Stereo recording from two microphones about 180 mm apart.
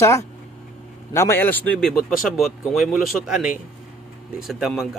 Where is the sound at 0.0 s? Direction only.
15° left (ahead or behind).